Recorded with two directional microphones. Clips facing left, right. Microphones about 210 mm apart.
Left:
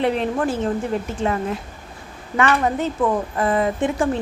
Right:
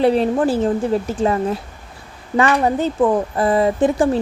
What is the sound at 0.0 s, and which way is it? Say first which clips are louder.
Speech: right 5 dB; 35° right (ahead or behind).